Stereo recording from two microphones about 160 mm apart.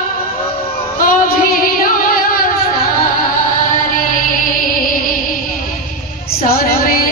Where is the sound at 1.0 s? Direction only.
65° left (ahead or behind).